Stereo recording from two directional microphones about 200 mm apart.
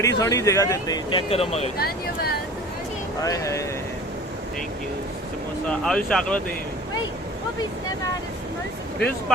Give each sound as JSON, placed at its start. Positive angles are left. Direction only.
{"t": 0.0, "sound": "speech", "side_deg": 15}
{"t": 1.8, "sound": "speech", "side_deg": 50}
{"t": 3.2, "sound": "speech", "side_deg": 15}
{"t": 5.6, "sound": "speech", "side_deg": 0}